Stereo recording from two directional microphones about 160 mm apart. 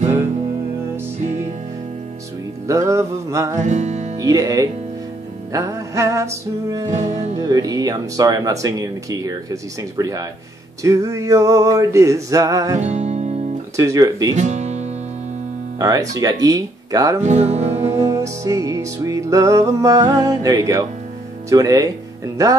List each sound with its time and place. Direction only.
2.6 s speech: 20° right (ahead or behind)
3.6 s music: 45° right (ahead or behind)
4.2 s speech: 25° right (ahead or behind)
6.9 s music: 45° right (ahead or behind)
7.3 s speech: 25° right (ahead or behind)
12.7 s music: 45° right (ahead or behind)
13.7 s speech: 20° right (ahead or behind)
14.3 s music: 45° right (ahead or behind)
15.8 s speech: 20° right (ahead or behind)
17.2 s music: 45° right (ahead or behind)
18.0 s speech: 20° right (ahead or behind)